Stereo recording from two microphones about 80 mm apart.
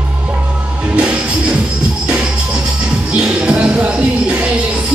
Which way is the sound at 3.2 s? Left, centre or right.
Centre.